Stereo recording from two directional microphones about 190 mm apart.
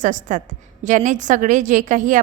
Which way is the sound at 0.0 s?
45° right (ahead or behind).